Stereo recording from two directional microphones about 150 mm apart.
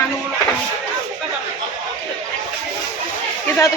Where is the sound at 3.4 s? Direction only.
15° left (ahead or behind).